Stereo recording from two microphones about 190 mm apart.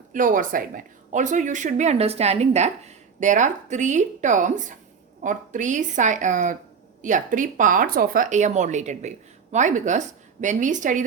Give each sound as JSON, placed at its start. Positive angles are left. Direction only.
{"t": 0.1, "sound": "speech", "side_deg": -45}